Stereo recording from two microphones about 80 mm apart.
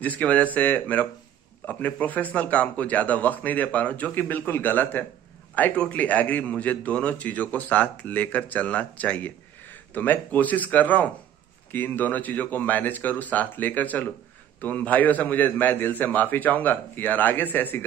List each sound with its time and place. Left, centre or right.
0.0 s a man's voice: centre